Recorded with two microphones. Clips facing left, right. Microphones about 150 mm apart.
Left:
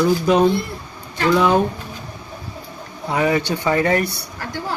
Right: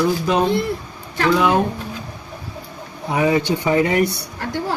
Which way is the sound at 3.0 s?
20° right (ahead or behind).